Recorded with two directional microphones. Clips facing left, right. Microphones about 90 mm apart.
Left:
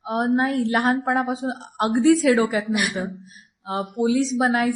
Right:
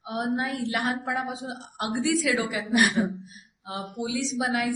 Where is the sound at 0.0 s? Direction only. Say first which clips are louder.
Left 7 dB; 45° left (ahead or behind).